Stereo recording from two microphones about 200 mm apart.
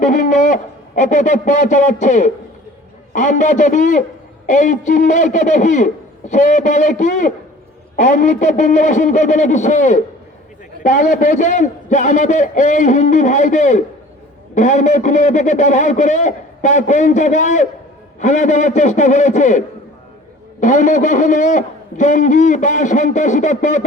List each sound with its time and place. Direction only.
0.0 s a man's voice: 40° left (ahead or behind)